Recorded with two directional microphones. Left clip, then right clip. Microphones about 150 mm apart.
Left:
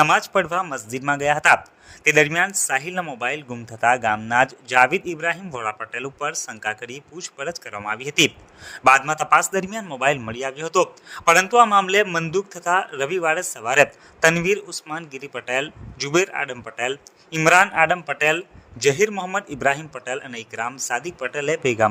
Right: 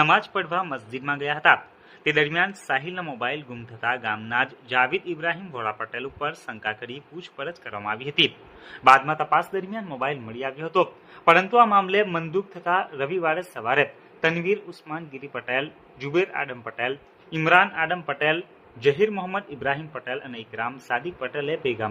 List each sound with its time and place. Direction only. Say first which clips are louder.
0.0 s a man's voice: left 3 dB; 45° left (ahead or behind)